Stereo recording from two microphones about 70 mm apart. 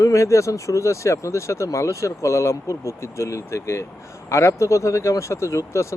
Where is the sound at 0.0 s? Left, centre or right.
Left.